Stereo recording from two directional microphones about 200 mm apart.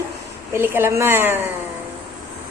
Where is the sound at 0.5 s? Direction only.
10° right (ahead or behind).